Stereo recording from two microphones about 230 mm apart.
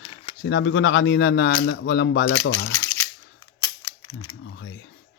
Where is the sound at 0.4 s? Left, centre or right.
Left.